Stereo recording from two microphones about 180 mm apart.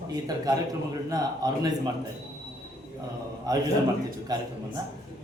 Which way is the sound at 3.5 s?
20° right (ahead or behind).